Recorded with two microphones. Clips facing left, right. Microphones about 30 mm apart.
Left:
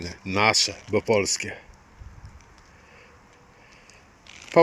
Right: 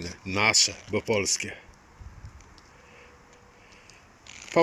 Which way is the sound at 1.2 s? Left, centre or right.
Left.